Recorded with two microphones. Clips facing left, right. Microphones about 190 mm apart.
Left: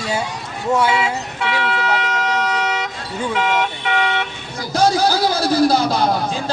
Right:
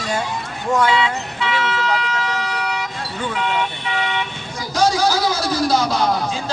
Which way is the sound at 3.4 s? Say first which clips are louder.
Left 3 dB; 75° left (ahead or behind).